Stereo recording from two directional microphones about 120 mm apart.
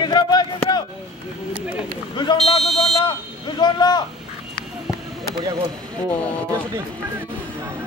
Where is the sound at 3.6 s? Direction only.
35° left (ahead or behind).